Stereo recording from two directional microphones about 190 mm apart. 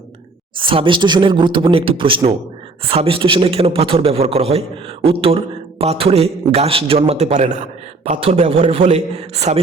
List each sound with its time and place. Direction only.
0.5 s a man's voice: 25° right (ahead or behind)